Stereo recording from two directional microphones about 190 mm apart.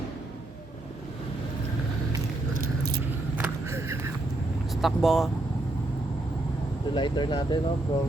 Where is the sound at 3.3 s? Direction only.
10° right (ahead or behind).